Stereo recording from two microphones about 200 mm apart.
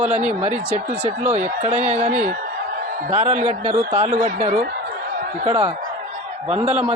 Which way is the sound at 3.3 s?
35° right (ahead or behind).